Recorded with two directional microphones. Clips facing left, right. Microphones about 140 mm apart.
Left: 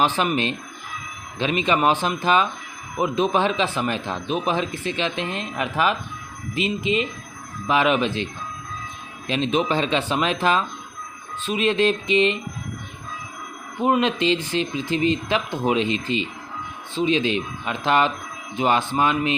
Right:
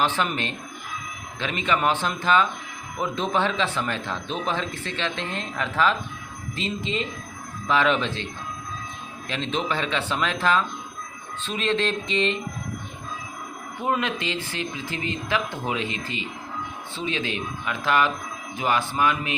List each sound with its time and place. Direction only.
0.0 s speech: 15° left (ahead or behind)
13.8 s speech: 20° left (ahead or behind)